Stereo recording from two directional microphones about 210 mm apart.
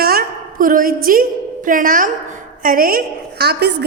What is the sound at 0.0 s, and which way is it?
A woman's voice, 45° right (ahead or behind).